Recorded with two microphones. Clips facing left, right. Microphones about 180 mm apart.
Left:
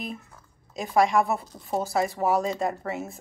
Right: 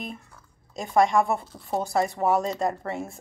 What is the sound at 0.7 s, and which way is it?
Speech, centre (ahead or behind).